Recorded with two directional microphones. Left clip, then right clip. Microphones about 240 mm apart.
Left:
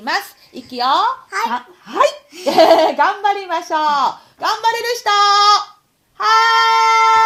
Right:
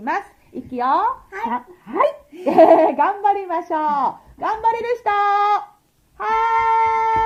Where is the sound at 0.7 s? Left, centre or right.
Left.